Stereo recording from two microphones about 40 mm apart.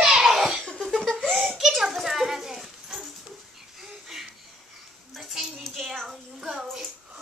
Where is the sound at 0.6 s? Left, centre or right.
Centre.